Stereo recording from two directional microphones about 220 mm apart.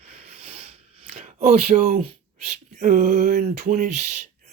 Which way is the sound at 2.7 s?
35° right (ahead or behind).